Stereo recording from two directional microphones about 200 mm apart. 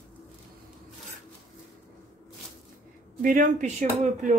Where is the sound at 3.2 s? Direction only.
40° right (ahead or behind).